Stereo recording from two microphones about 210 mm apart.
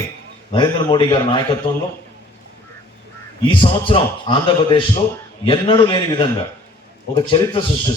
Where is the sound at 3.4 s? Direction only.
25° left (ahead or behind).